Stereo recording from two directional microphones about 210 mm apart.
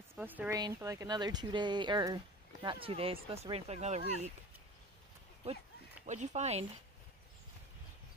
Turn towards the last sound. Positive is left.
turn(degrees=-30)  # may be behind; listen again after turning